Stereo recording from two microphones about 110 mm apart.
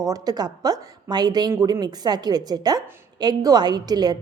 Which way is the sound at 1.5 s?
25° right (ahead or behind).